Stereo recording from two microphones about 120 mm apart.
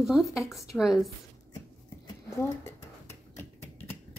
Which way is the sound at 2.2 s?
25° left (ahead or behind).